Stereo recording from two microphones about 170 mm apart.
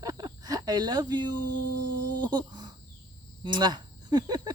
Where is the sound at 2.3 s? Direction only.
25° right (ahead or behind).